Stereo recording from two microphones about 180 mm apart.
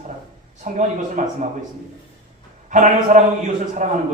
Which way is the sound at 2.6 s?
45° right (ahead or behind).